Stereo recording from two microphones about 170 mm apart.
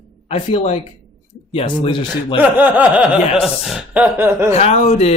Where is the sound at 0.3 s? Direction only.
40° left (ahead or behind).